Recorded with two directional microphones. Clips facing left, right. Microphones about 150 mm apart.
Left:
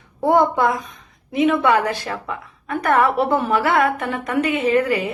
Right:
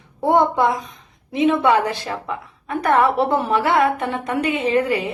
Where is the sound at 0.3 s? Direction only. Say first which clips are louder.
Even; 20° right (ahead or behind).